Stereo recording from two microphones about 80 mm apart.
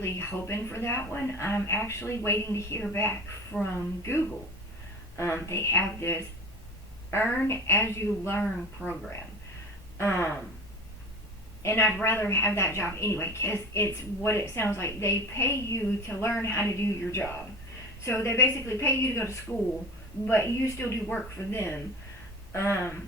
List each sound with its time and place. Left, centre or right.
0.0 s a woman's voice: left
10.0 s a woman's voice: left
11.6 s a woman's voice: left